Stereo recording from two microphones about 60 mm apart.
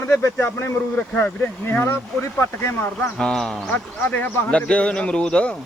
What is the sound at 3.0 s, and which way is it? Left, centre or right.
Speech, centre.